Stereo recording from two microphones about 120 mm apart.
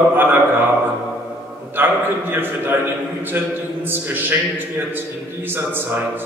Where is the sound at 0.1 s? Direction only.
15° right (ahead or behind).